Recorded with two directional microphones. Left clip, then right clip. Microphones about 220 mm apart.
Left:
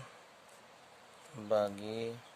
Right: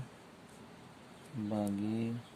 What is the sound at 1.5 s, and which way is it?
Speech, 40° left (ahead or behind).